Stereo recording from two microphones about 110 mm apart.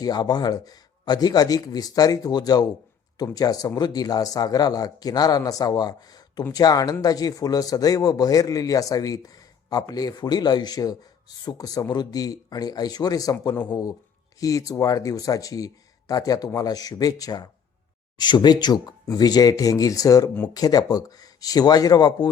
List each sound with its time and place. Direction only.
0.0 s a man's voice: 40° left (ahead or behind)